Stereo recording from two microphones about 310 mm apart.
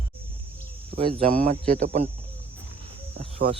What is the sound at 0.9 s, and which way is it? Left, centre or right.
Speech, centre.